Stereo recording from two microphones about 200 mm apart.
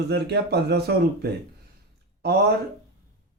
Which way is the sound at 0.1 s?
55° right (ahead or behind).